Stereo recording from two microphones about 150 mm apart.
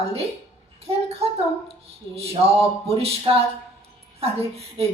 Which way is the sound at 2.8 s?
40° right (ahead or behind).